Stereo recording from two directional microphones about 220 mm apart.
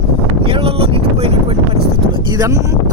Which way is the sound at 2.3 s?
15° right (ahead or behind).